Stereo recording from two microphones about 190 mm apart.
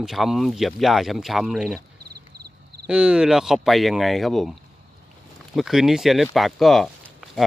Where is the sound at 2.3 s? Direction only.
55° right (ahead or behind).